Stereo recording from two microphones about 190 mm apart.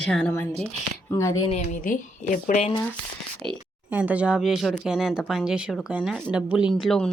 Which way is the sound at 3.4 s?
25° right (ahead or behind).